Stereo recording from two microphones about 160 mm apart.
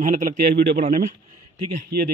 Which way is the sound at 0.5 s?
75° right (ahead or behind).